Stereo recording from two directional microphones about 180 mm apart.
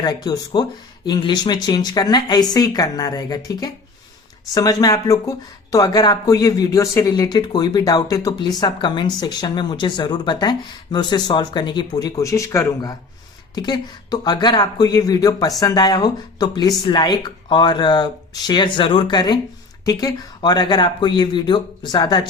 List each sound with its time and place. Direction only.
0.0 s speech: 20° left (ahead or behind)